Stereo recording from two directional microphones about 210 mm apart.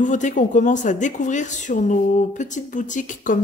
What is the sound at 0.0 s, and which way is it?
A woman's voice, 35° left (ahead or behind).